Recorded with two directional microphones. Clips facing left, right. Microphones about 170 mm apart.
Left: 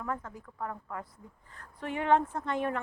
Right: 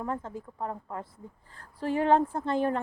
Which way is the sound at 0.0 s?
25° right (ahead or behind).